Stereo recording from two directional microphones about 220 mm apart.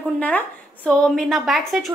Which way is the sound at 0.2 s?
5° left (ahead or behind).